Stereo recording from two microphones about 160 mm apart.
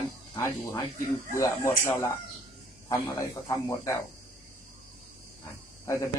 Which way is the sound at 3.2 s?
15° left (ahead or behind).